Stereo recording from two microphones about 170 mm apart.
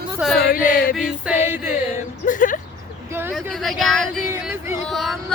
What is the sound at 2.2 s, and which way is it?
Speech, 50° left (ahead or behind).